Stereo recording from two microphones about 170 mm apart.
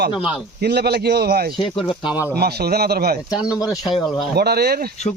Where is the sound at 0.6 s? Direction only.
75° right (ahead or behind).